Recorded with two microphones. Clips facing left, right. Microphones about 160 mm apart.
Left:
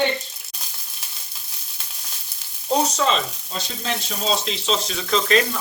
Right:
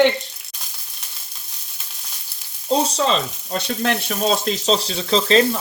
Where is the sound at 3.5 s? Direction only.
65° right (ahead or behind); by 5.6 s 30° right (ahead or behind).